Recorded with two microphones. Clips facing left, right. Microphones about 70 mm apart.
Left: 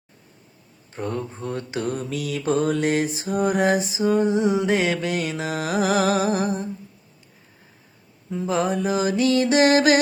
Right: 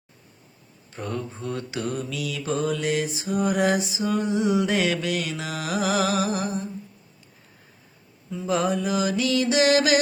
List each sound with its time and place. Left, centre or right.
0.9 s speech: left
1.4 s mantra: left
8.4 s mantra: left